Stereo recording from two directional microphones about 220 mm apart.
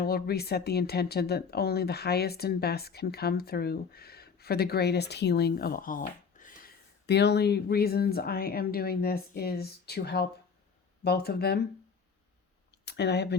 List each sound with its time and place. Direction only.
0.0 s speech: 45° left (ahead or behind)
12.8 s speech: 50° left (ahead or behind)